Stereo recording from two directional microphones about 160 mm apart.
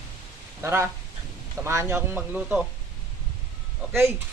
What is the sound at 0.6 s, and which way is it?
Speech, 15° right (ahead or behind).